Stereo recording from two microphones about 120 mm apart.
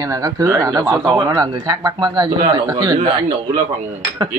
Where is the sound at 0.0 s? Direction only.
25° right (ahead or behind).